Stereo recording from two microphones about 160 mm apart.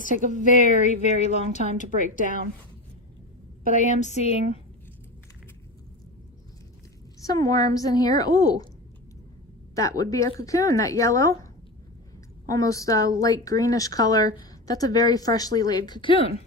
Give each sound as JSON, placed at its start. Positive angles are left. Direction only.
{"t": 0.6, "sound": "a woman's voice", "side_deg": 50}
{"t": 1.9, "sound": "a woman's voice", "side_deg": -55}
{"t": 3.7, "sound": "a woman's voice", "side_deg": 50}
{"t": 7.2, "sound": "a woman's voice", "side_deg": 20}
{"t": 9.7, "sound": "a woman's voice", "side_deg": 20}
{"t": 12.5, "sound": "a woman's voice", "side_deg": 20}